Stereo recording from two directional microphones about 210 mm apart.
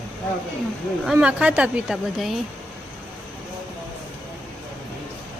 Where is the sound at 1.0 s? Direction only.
5° right (ahead or behind).